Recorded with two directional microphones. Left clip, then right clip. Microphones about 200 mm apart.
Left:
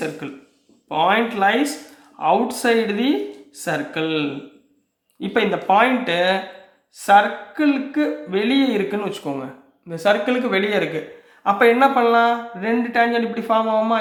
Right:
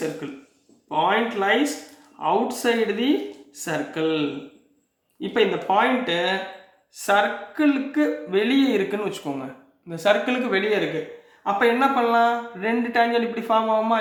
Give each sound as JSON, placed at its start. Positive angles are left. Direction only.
{"t": 0.9, "sound": "speech", "side_deg": 30}
{"t": 5.3, "sound": "speech", "side_deg": 35}
{"t": 7.0, "sound": "speech", "side_deg": 20}